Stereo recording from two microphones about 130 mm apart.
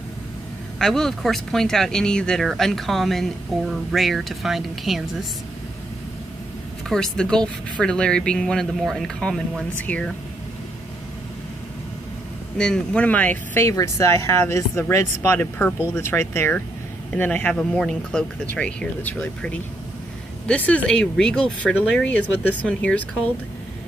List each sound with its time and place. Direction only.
0.7 s speech: 5° left (ahead or behind)
6.9 s speech: 5° left (ahead or behind)
12.5 s speech: 5° left (ahead or behind)